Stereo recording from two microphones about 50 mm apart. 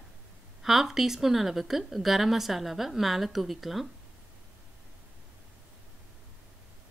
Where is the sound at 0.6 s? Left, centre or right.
Centre.